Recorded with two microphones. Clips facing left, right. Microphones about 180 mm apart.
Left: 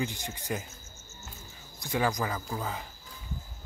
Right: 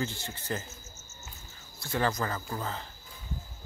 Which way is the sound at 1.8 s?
15° left (ahead or behind).